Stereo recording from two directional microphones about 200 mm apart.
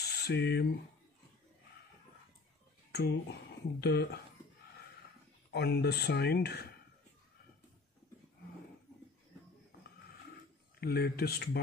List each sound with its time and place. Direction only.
0.1 s speech: 55° left (ahead or behind)
2.9 s speech: 55° left (ahead or behind)
5.5 s speech: 50° left (ahead or behind)
10.8 s speech: 50° left (ahead or behind)